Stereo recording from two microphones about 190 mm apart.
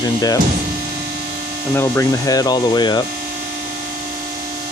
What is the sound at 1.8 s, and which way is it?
Speech, 15° left (ahead or behind).